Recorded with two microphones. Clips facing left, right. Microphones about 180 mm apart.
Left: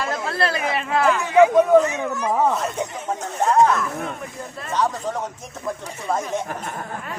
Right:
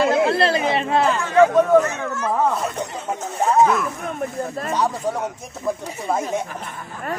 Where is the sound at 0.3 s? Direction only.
25° right (ahead or behind).